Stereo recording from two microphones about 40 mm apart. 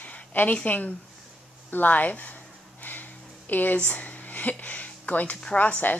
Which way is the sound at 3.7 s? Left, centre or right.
Left.